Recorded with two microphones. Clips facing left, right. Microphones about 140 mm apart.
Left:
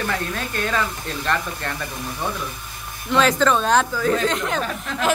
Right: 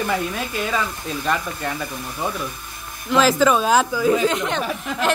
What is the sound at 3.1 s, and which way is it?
Speech, 5° right (ahead or behind).